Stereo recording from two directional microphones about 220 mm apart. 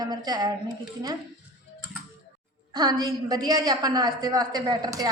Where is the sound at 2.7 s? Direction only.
20° right (ahead or behind).